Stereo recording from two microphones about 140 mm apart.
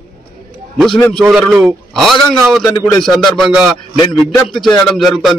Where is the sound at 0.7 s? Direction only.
5° left (ahead or behind).